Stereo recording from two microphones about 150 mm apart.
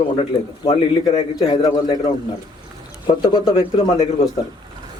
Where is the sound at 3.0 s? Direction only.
40° left (ahead or behind).